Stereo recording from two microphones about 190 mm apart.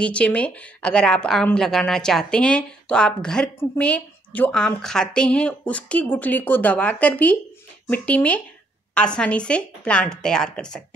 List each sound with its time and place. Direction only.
0.0 s speech: 5° left (ahead or behind)